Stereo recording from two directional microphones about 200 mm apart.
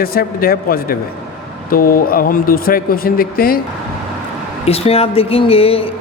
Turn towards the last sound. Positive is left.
turn(degrees=30)  # may be behind; listen again after turning